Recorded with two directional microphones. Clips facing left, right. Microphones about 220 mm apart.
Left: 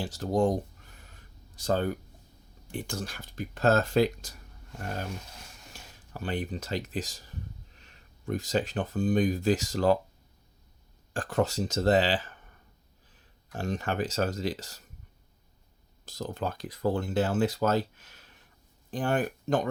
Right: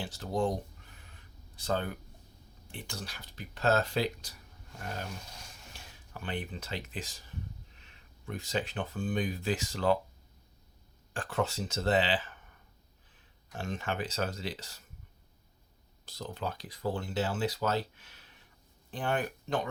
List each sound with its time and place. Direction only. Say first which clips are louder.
0.0 s speech: left 5 dB; 45° left (ahead or behind)
6.1 s speech: left 5 dB; 40° left (ahead or behind)
11.1 s speech: left 5 dB; 40° left (ahead or behind)
13.6 s speech: left 5 dB; 40° left (ahead or behind)
16.0 s speech: left 4 dB; 45° left (ahead or behind)